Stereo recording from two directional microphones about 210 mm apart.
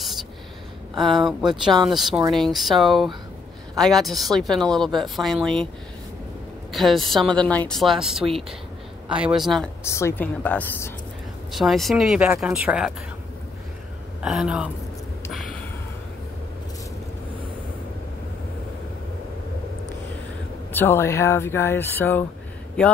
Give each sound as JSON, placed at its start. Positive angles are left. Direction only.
{"t": 0.9, "sound": "a woman's voice", "side_deg": 0}
{"t": 6.7, "sound": "a woman's voice", "side_deg": 0}
{"t": 9.8, "sound": "a woman's voice", "side_deg": 15}
{"t": 14.2, "sound": "a woman's voice", "side_deg": -5}
{"t": 20.7, "sound": "speech", "side_deg": 10}